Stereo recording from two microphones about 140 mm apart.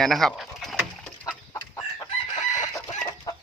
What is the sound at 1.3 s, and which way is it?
Chicken, 30° left (ahead or behind).